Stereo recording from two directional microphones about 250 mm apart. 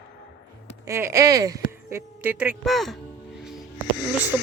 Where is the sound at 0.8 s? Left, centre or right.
Centre.